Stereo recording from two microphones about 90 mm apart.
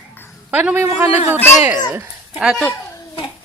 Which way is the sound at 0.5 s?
20° right (ahead or behind).